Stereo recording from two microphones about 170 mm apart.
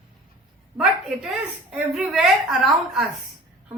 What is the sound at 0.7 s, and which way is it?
A woman's voice, 5° right (ahead or behind).